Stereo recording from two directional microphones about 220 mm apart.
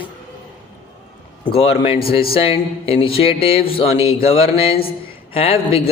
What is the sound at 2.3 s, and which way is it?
Speech, 25° left (ahead or behind).